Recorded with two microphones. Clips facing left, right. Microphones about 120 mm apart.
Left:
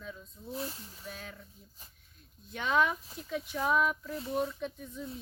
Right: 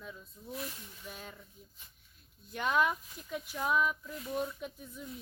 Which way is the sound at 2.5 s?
Centre (ahead or behind).